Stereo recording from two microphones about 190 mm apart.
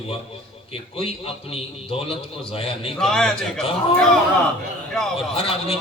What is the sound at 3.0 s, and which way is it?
Speech, 5° left (ahead or behind).